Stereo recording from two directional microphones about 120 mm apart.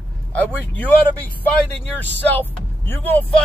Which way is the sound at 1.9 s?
15° left (ahead or behind).